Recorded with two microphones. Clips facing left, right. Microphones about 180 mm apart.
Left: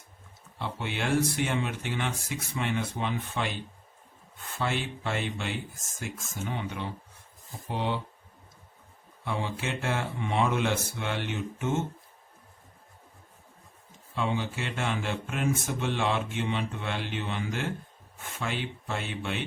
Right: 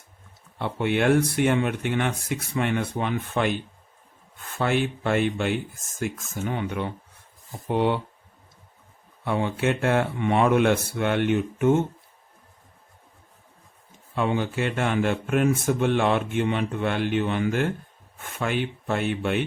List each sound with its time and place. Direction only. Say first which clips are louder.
0.6 s speech: right 10 dB; 55° right (ahead or behind)
4.5 s speech: right 7 dB; 55° right (ahead or behind)
9.2 s speech: right 8 dB; 55° right (ahead or behind)
14.2 s speech: right 6 dB; 55° right (ahead or behind)